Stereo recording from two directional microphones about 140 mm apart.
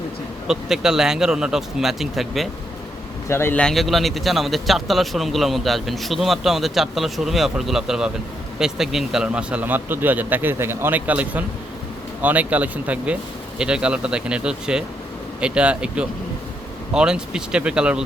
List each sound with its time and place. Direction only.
0.4 s a man's voice: 5° right (ahead or behind)
3.2 s speech: 15° left (ahead or behind)
3.6 s a man's voice: centre (ahead or behind)